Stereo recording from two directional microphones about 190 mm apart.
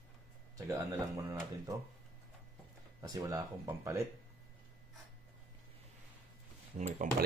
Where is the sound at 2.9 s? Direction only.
20° right (ahead or behind).